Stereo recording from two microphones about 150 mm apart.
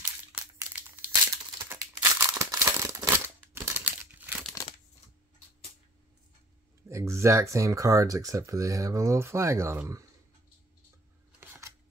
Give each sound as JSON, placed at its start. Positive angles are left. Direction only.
{"t": 0.6, "sound": "crumpling", "side_deg": -15}
{"t": 6.9, "sound": "speech", "side_deg": -20}
{"t": 11.3, "sound": "a sound", "side_deg": -15}